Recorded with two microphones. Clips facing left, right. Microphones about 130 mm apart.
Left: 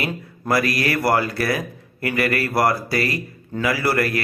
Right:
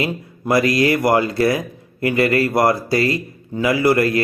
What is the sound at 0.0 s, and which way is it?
A man's voice, 20° right (ahead or behind).